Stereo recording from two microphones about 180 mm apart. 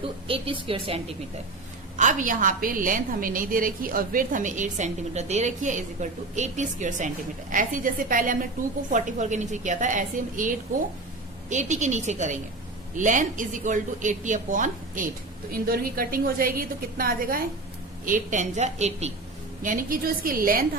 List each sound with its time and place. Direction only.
0.3 s a woman's voice: 30° right (ahead or behind)
2.0 s a woman's voice: 45° right (ahead or behind)
19.6 s a woman's voice: 50° right (ahead or behind)